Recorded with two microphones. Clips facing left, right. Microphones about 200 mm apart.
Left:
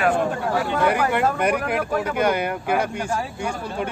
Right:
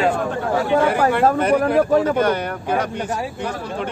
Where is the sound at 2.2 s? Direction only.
10° left (ahead or behind).